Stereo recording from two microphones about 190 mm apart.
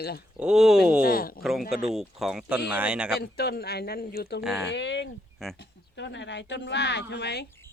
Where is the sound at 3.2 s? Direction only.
60° left (ahead or behind).